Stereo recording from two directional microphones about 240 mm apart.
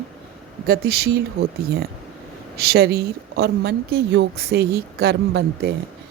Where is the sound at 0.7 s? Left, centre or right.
Right.